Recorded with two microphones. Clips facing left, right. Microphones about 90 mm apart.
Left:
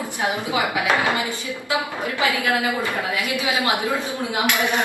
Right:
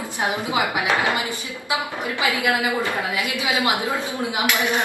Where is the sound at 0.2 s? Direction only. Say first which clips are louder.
Even; 20° right (ahead or behind).